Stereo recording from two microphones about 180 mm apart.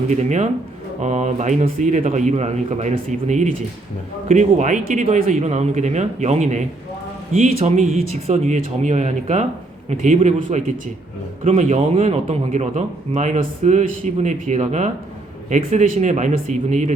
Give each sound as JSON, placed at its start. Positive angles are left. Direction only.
{"t": 0.1, "sound": "a man's voice", "side_deg": -40}